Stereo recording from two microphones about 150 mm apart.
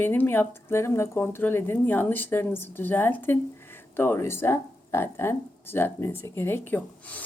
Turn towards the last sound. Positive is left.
turn(degrees=10)  # may be behind; listen again after turning